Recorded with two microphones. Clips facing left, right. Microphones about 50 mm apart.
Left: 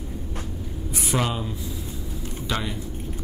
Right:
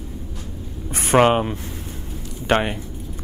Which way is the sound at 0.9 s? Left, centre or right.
Right.